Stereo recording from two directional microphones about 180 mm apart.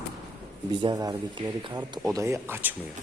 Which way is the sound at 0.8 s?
20° right (ahead or behind).